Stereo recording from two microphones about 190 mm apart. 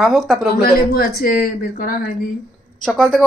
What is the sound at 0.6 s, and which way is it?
Speech, 55° left (ahead or behind).